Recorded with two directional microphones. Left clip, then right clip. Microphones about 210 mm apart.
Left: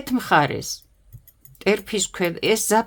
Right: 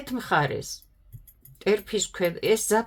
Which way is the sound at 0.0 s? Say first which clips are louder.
Left 6 dB; 35° left (ahead or behind).